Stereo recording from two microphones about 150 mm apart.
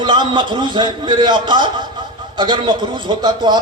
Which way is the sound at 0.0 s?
30° right (ahead or behind).